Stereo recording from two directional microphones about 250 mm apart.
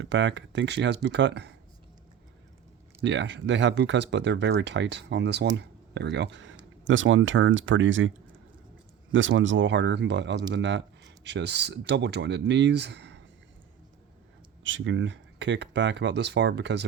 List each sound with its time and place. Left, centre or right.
0.0 s speech: right
3.0 s speech: right
9.1 s speech: right
14.6 s speech: right